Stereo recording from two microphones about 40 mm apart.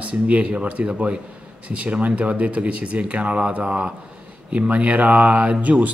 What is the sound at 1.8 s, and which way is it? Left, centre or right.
Speech, right.